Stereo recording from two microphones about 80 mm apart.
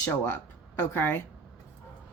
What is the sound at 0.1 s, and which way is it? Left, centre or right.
Speech, left.